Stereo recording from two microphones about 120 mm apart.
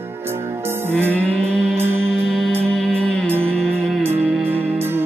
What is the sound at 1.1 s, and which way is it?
Music, 10° left (ahead or behind).